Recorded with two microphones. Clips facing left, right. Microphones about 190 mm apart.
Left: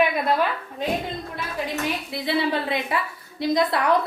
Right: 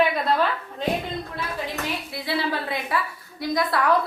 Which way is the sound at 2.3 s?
20° left (ahead or behind).